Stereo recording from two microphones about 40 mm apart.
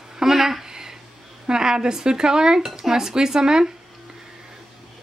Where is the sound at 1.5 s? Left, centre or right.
Centre.